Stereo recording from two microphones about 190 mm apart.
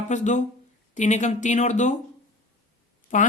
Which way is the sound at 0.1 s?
40° left (ahead or behind).